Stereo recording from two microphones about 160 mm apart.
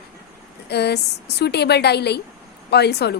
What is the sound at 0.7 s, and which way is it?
A woman's voice, 90° left.